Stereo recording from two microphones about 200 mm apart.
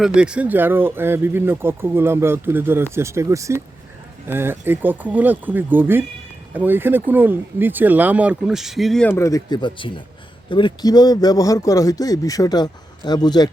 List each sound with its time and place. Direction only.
0.0 s speech: 5° right (ahead or behind); by 13.5 s 20° left (ahead or behind)